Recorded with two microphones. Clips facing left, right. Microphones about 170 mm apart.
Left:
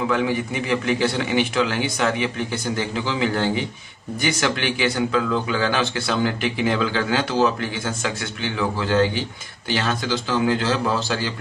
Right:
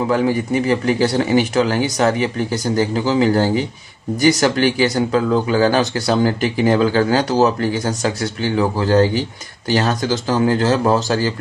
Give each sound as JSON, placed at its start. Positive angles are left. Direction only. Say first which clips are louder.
{"t": 0.1, "sound": "a man's voice", "louder": "right 5 dB", "side_deg": -40}